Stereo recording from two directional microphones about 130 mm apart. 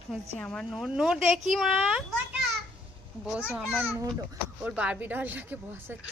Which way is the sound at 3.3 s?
10° right (ahead or behind).